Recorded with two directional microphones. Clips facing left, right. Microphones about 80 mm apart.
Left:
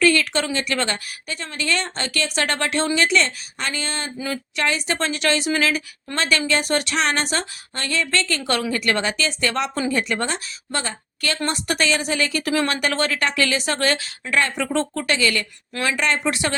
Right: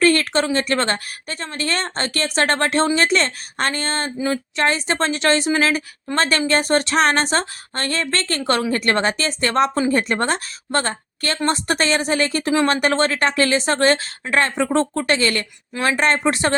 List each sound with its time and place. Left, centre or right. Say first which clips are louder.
0.0 s a woman's voice: right 2 dB; right